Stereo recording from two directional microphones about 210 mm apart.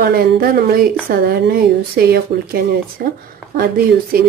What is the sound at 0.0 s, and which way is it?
Speech, 45° right (ahead or behind).